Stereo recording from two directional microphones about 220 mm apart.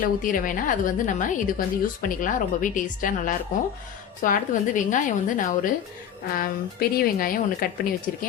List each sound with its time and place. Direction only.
0.0 s a woman's voice: 40° left (ahead or behind)